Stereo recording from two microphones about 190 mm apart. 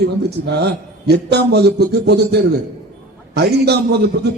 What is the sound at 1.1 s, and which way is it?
A man's voice, 60° right (ahead or behind).